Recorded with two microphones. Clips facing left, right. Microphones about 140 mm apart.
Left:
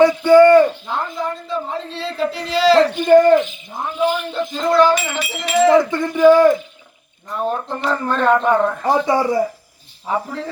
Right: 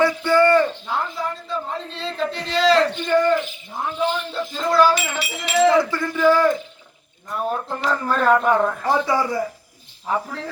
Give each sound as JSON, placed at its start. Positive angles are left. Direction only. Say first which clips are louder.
{"t": 0.0, "sound": "a sound", "louder": "left 7 dB", "side_deg": 20}
{"t": 0.9, "sound": "a sound", "louder": "left 2 dB", "side_deg": 0}
{"t": 3.3, "sound": "speech", "louder": "left 7 dB", "side_deg": 20}
{"t": 7.3, "sound": "speech", "louder": "left 3 dB", "side_deg": -5}
{"t": 8.8, "sound": "speech", "louder": "left 4 dB", "side_deg": 20}
{"t": 10.1, "sound": "speech", "louder": "left 2 dB", "side_deg": 0}